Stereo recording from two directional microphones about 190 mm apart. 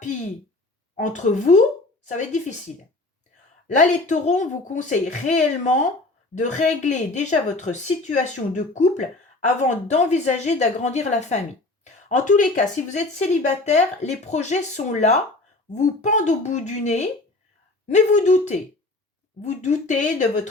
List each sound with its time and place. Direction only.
0.9 s speech: 40° left (ahead or behind)
3.7 s speech: 40° left (ahead or behind)